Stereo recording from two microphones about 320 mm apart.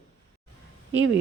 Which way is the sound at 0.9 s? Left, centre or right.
Right.